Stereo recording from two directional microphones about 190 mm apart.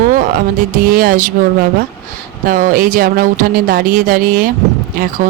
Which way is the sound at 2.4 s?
45° right (ahead or behind).